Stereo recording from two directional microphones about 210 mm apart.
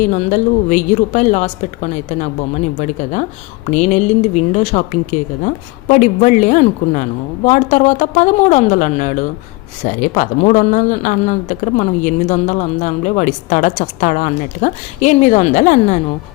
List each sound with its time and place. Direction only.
0.0 s speech: 35° left (ahead or behind)